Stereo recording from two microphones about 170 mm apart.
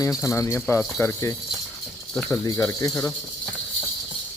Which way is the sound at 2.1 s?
5° left (ahead or behind).